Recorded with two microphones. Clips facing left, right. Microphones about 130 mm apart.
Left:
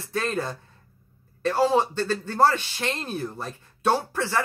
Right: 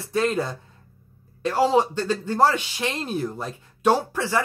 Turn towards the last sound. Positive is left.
turn(degrees=-15)  # may be behind; listen again after turning